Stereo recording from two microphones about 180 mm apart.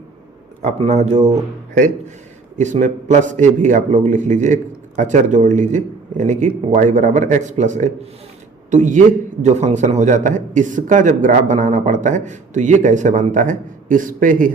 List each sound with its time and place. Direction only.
0.6 s a man's voice: 35° right (ahead or behind)
2.6 s a man's voice: 40° right (ahead or behind)